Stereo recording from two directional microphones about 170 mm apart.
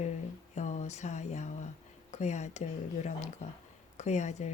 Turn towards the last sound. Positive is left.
turn(degrees=40)  # may be behind; listen again after turning